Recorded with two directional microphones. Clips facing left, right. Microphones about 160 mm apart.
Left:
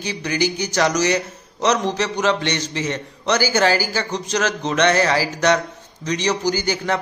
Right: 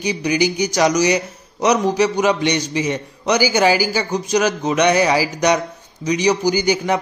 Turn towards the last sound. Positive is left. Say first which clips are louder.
# right 4 dB
turn(degrees=-15)  # may be behind; listen again after turning